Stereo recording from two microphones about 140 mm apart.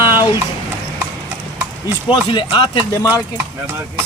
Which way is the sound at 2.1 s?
35° left (ahead or behind).